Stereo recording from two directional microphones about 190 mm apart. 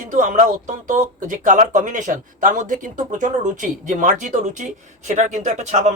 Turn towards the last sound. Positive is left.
turn(degrees=-40)  # may be behind; listen again after turning